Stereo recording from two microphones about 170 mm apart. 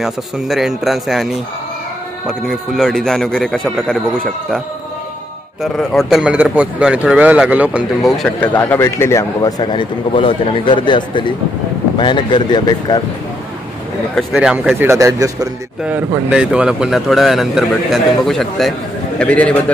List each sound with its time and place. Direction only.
0.0 s a man's voice: centre (ahead or behind)
5.6 s a man's voice: centre (ahead or behind)
8.5 s a man's voice: 15° left (ahead or behind)
14.1 s speech: 5° right (ahead or behind)
15.8 s a man's voice: 10° right (ahead or behind); by 19.6 s 10° left (ahead or behind)